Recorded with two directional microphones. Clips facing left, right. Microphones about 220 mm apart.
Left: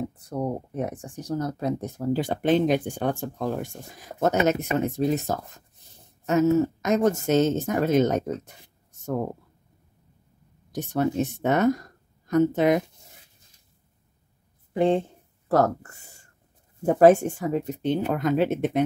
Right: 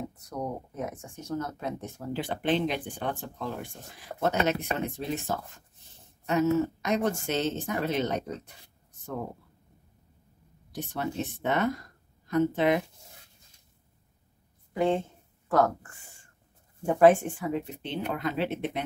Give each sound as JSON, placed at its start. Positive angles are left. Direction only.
{"t": 0.2, "sound": "speech", "side_deg": 30}
{"t": 10.7, "sound": "speech", "side_deg": 45}
{"t": 14.7, "sound": "speech", "side_deg": 30}
{"t": 15.4, "sound": "speech", "side_deg": 40}